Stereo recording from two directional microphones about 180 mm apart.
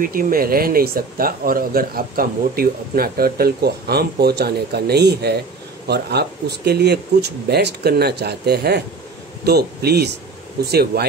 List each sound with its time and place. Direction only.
0.0 s speech: 50° right (ahead or behind)